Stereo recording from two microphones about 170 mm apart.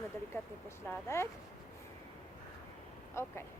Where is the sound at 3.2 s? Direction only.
15° left (ahead or behind).